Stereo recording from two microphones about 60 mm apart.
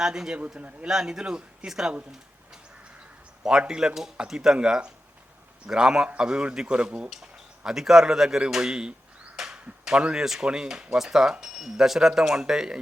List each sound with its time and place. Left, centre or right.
0.0 s speech: centre
0.6 s a man's voice: right
0.9 s speech: centre
3.6 s speech: centre